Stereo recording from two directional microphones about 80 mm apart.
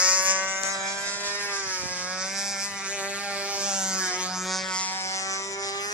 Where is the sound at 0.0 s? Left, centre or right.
Centre.